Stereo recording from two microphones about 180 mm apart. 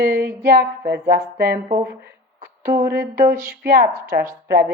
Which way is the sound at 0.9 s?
60° right (ahead or behind).